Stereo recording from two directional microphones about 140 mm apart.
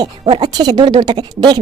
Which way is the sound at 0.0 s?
35° right (ahead or behind).